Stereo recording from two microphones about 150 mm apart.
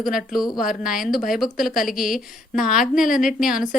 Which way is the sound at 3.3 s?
5° right (ahead or behind).